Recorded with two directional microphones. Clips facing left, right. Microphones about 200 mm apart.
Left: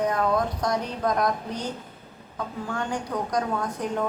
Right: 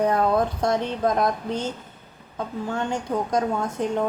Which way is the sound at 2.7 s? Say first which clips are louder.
Right 3 dB; 25° right (ahead or behind).